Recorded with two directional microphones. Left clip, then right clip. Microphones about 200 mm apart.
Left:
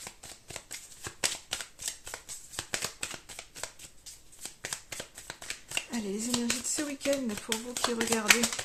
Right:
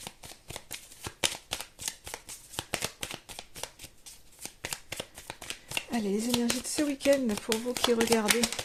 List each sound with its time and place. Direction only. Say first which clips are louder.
0.0 s shuffling cards: right 1 dB; 25° right (ahead or behind)
2.6 s a sound: right 1 dB; 30° right (ahead or behind)
4.4 s speech: right 1 dB; 25° right (ahead or behind)